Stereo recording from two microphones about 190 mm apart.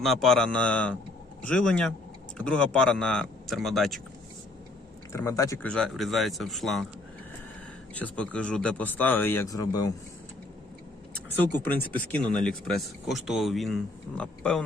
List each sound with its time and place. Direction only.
0.0 s speech: centre (ahead or behind)
5.1 s speech: 15° left (ahead or behind)
5.7 s speech: centre (ahead or behind)
7.9 s speech: 5° left (ahead or behind)
12.1 s speech: 5° left (ahead or behind)